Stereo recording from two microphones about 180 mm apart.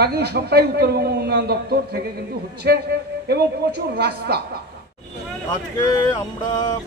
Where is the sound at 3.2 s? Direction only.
65° right (ahead or behind).